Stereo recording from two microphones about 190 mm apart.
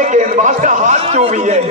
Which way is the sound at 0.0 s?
40° right (ahead or behind).